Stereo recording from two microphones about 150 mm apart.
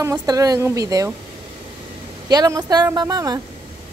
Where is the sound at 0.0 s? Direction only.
20° right (ahead or behind).